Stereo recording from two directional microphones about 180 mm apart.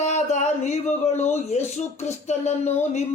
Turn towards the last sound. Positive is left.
turn(degrees=40)  # may be behind; listen again after turning